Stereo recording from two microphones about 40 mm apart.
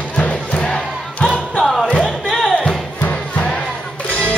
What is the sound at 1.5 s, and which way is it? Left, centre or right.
Music, centre.